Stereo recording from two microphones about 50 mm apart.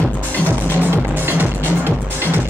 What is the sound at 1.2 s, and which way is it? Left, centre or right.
Music, right.